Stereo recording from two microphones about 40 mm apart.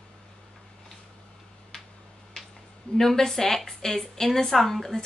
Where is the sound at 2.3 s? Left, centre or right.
Centre.